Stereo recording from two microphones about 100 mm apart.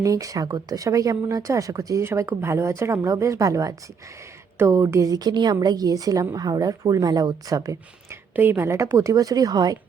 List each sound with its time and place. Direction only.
0.0 s a woman's voice: 35° right (ahead or behind)